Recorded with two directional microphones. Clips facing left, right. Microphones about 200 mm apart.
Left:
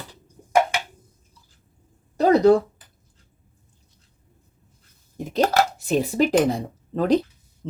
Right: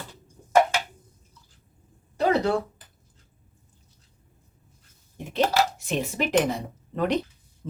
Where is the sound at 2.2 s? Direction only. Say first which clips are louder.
Left 7 dB; 40° left (ahead or behind).